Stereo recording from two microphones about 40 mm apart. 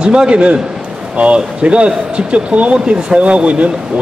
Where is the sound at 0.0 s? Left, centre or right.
Right.